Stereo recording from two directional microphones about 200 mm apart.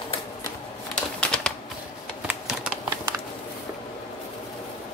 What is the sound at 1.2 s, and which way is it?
Bird, 5° left (ahead or behind).